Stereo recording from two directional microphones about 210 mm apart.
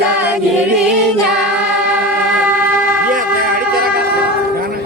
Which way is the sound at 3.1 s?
40° right (ahead or behind).